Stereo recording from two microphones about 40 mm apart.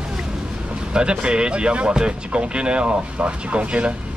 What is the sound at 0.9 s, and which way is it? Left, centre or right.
Speech, right.